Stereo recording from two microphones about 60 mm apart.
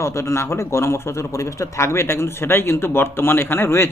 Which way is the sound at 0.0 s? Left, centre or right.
Left.